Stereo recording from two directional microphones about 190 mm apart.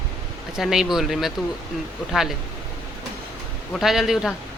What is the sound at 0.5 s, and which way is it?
Speech, centre (ahead or behind).